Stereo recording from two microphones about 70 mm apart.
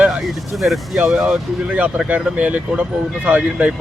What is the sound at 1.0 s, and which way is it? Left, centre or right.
Speech, centre.